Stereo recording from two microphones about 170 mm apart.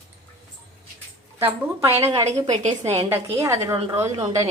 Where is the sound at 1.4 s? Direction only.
15° right (ahead or behind).